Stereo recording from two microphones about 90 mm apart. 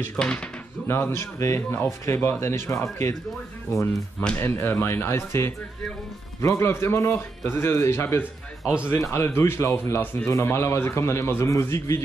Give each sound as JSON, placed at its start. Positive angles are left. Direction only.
{"t": 0.1, "sound": "speech", "side_deg": 10}
{"t": 0.8, "sound": "speech", "side_deg": 30}
{"t": 4.4, "sound": "a man's voice", "side_deg": 25}